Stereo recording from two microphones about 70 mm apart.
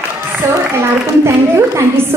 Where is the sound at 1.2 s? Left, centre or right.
Right.